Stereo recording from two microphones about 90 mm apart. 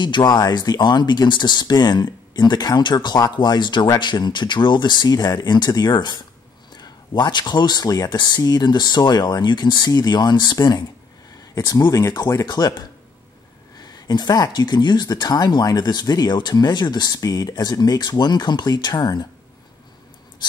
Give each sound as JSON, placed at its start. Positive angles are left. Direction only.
{"t": 0.0, "sound": "speech", "side_deg": 55}
{"t": 11.5, "sound": "speech", "side_deg": 40}
{"t": 12.4, "sound": "speech", "side_deg": 50}